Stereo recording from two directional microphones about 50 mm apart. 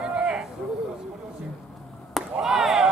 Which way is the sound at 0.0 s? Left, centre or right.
Centre.